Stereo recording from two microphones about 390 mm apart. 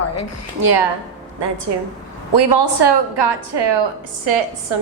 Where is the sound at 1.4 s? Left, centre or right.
Right.